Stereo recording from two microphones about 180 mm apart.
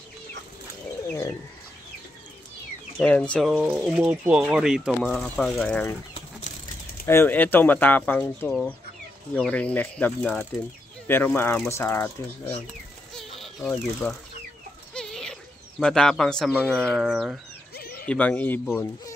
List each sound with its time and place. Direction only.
3.0 s speech: 5° left (ahead or behind)
7.1 s speech: 10° left (ahead or behind)
13.1 s a sound: centre (ahead or behind)
15.8 s speech: 5° left (ahead or behind)
17.7 s bird: 60° left (ahead or behind)
18.0 s speech: 5° left (ahead or behind)